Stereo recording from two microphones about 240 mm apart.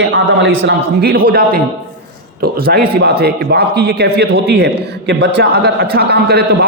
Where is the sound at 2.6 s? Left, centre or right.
Right.